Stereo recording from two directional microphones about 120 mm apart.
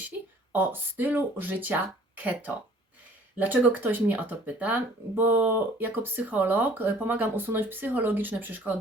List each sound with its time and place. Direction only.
0.5 s speech: 15° right (ahead or behind)